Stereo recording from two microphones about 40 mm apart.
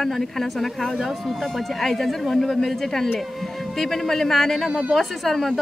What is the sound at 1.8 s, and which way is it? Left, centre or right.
Speech, centre.